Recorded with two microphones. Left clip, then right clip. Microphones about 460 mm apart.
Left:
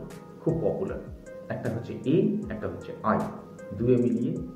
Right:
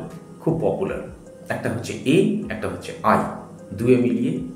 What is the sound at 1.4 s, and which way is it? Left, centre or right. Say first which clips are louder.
Speech: right 7 dB; left.